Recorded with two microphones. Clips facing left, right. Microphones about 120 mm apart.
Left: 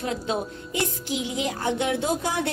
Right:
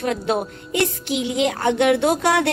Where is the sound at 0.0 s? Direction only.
70° right (ahead or behind).